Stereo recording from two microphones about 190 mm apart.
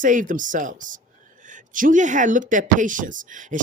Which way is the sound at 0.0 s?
45° right (ahead or behind).